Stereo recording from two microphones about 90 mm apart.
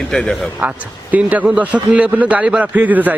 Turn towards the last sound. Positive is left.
turn(degrees=-20)  # may be behind; listen again after turning